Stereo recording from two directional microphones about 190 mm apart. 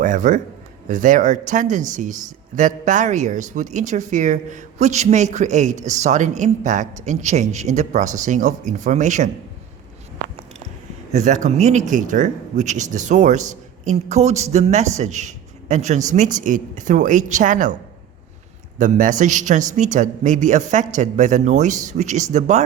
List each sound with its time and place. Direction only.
0.0 s speech: 40° right (ahead or behind)
11.1 s speech: 40° right (ahead or behind)
18.8 s speech: 40° right (ahead or behind)